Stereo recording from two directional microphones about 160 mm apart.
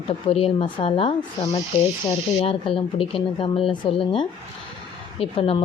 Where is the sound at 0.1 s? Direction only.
35° left (ahead or behind).